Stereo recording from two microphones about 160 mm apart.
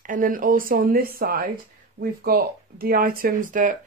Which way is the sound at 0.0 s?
55° right (ahead or behind).